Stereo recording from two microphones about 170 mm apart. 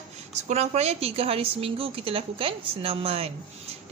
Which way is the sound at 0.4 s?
40° right (ahead or behind).